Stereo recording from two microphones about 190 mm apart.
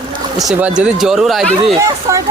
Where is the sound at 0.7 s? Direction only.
5° right (ahead or behind).